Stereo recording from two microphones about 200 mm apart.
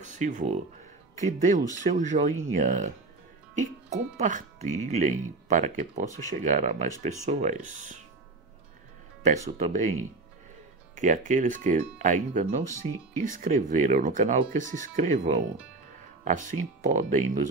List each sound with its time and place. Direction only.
0.0 s speech: 35° right (ahead or behind)
9.2 s speech: 35° right (ahead or behind)
11.0 s speech: 40° right (ahead or behind)